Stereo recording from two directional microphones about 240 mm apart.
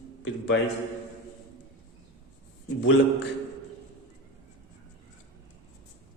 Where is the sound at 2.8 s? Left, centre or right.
Left.